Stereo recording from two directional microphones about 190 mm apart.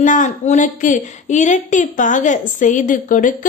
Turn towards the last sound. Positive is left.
turn(degrees=45)  # may be behind; listen again after turning